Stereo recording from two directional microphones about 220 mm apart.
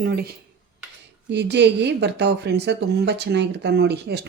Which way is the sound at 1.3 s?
50° right (ahead or behind).